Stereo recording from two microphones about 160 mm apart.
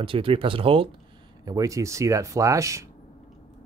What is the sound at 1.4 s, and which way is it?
Speech, 20° right (ahead or behind).